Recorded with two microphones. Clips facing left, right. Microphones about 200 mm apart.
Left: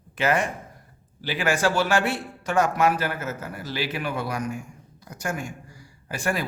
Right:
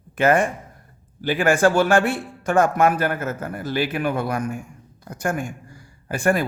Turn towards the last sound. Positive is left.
turn(degrees=-50)  # may be behind; listen again after turning